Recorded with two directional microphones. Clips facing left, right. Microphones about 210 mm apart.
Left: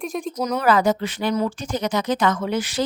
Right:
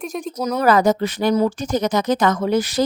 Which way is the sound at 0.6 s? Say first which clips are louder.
Right 4 dB; 40° right (ahead or behind).